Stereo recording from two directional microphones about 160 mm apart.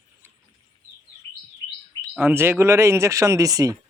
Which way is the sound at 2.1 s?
10° right (ahead or behind).